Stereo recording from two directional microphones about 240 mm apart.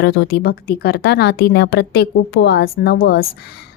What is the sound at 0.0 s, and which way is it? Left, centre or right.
A woman's voice, left.